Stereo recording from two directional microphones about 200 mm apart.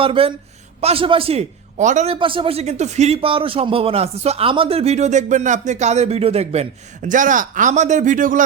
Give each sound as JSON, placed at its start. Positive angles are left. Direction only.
{"t": 0.0, "sound": "speech", "side_deg": -25}
{"t": 2.1, "sound": "speech", "side_deg": -25}